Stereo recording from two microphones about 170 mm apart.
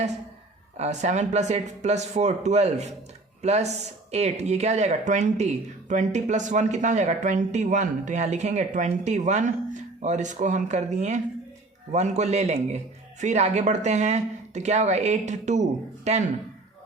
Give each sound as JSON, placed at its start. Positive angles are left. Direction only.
{"t": 0.8, "sound": "speech", "side_deg": -45}